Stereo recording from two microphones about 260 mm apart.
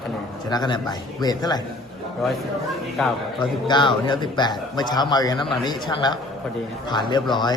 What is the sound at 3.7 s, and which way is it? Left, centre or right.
A man's voice, centre.